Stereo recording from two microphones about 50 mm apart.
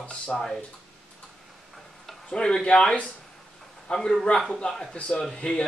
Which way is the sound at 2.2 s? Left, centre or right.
Centre.